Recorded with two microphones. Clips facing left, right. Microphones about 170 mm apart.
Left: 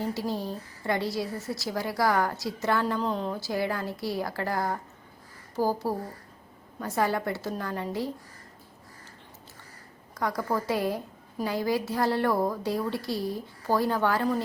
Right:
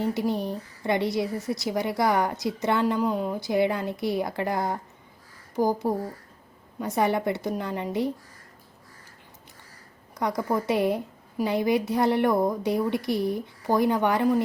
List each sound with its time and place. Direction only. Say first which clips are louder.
0.0 s a woman's voice: right 4 dB; 20° right (ahead or behind)
10.2 s a woman's voice: right 3 dB; 20° right (ahead or behind)